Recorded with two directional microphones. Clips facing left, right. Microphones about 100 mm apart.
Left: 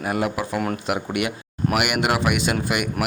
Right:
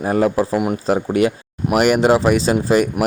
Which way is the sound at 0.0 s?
35° right (ahead or behind).